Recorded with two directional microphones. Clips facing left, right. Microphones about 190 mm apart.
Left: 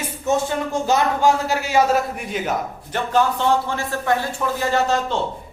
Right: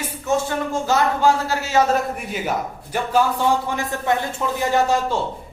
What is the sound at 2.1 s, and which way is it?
A man's voice, 5° right (ahead or behind).